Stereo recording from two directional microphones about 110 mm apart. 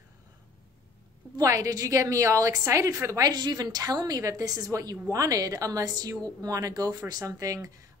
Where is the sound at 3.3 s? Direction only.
40° right (ahead or behind).